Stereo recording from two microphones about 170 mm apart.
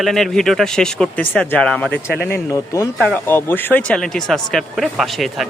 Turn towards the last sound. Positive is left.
turn(degrees=0)  # may be behind; listen again after turning